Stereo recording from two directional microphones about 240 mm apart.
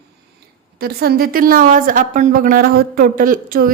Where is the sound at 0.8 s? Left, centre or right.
Right.